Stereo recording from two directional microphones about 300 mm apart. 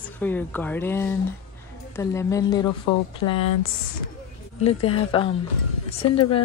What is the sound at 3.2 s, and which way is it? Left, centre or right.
Speech, left.